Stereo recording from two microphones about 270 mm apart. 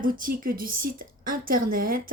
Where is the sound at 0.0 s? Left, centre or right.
Right.